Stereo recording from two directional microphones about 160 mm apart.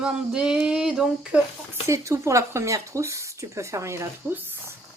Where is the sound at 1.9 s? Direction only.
20° right (ahead or behind).